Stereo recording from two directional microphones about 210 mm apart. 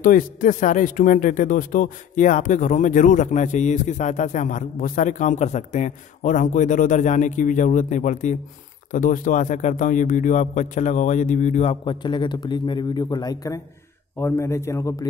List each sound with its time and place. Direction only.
0.0 s a man's voice: 40° left (ahead or behind); by 15.0 s 15° left (ahead or behind)